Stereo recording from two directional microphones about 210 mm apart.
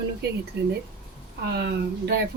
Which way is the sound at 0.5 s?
50° right (ahead or behind).